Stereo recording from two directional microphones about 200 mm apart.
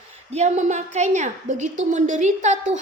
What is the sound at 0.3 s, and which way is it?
A woman's voice, 35° right (ahead or behind).